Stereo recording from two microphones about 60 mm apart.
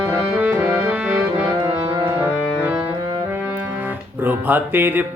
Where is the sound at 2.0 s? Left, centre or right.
Right.